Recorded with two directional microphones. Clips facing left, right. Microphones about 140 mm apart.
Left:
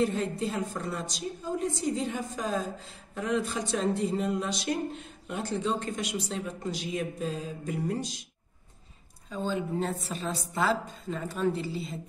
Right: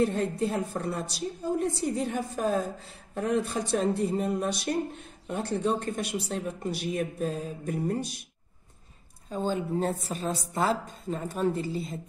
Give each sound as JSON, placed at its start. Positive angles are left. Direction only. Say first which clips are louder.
{"t": 0.1, "sound": "speech", "louder": "right 3 dB", "side_deg": -60}
{"t": 9.5, "sound": "speech", "louder": "right 2 dB", "side_deg": -45}